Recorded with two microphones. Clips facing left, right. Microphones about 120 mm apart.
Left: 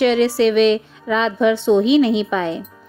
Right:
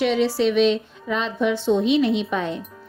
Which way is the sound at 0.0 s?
75° left (ahead or behind).